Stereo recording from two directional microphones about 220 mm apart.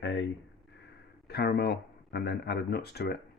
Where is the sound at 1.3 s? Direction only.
45° left (ahead or behind).